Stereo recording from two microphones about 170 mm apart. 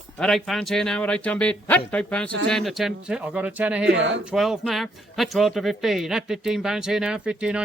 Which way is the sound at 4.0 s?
90° right.